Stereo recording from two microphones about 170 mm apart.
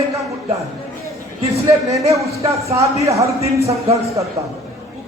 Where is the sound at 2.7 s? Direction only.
20° right (ahead or behind).